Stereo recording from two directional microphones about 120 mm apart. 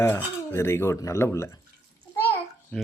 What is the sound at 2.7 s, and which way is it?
Speech, 10° left (ahead or behind).